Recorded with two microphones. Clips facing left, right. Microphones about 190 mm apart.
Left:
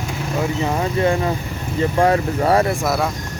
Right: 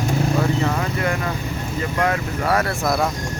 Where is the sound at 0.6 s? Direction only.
25° left (ahead or behind).